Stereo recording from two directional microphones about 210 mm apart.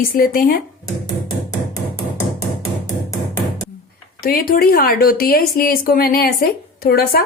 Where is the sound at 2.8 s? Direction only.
15° left (ahead or behind).